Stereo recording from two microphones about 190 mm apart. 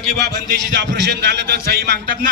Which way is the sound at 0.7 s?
65° right (ahead or behind).